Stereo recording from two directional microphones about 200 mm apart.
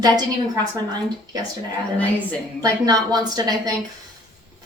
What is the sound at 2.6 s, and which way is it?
Speech, 20° right (ahead or behind).